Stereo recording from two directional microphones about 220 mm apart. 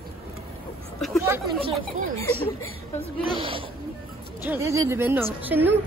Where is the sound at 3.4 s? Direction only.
25° right (ahead or behind).